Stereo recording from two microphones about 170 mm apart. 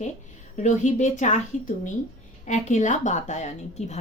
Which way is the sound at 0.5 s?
45° left (ahead or behind).